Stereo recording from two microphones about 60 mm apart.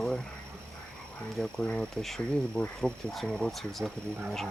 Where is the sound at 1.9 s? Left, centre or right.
Centre.